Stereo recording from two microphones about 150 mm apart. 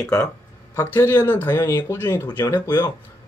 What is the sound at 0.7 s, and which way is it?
Speech, 15° left (ahead or behind).